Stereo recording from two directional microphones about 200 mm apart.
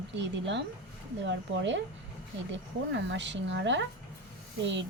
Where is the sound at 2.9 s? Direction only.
65° right (ahead or behind).